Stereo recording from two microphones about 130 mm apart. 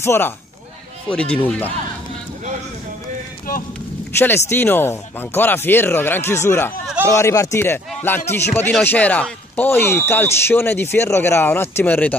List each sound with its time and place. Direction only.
0.0 s speech: 20° left (ahead or behind)
1.0 s speech: 10° left (ahead or behind)
4.2 s speech: 15° left (ahead or behind)